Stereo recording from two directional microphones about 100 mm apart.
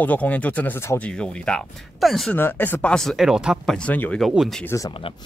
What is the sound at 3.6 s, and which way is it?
Speech, 10° left (ahead or behind).